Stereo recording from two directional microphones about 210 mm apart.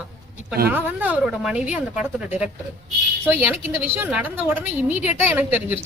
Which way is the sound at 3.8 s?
10° right (ahead or behind).